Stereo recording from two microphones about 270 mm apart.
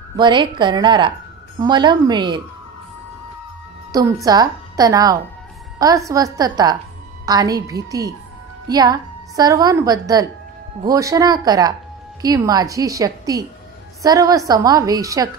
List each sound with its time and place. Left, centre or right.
0.1 s a woman's voice: centre
3.9 s a woman's voice: centre